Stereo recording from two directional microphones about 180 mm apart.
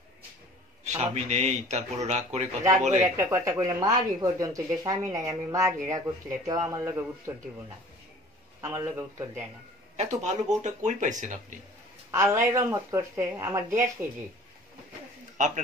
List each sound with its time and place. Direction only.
0.8 s a man's voice: 40° right (ahead or behind)
3.0 s speech: 15° right (ahead or behind)
8.5 s speech: 15° right (ahead or behind)
9.9 s speech: 40° right (ahead or behind)
12.1 s speech: 15° right (ahead or behind)
15.3 s speech: 45° right (ahead or behind)